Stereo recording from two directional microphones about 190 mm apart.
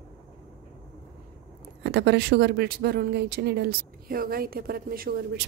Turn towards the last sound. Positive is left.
turn(degrees=-50)  # may be behind; listen again after turning